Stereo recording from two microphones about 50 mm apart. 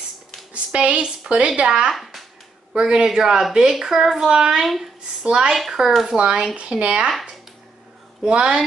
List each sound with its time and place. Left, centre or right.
0.7 s a woman's voice: right
5.5 s speech: centre; by 7.1 s right
8.2 s a woman's voice: centre